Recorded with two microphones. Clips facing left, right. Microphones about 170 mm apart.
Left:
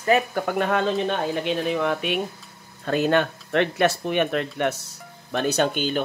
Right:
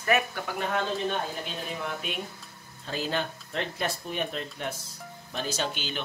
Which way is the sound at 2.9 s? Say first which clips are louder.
Left 10 dB; 65° left (ahead or behind).